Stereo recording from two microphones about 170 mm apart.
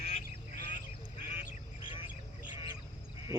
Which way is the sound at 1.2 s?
40° left (ahead or behind).